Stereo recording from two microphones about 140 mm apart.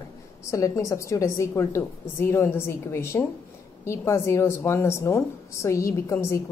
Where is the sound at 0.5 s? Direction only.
20° left (ahead or behind).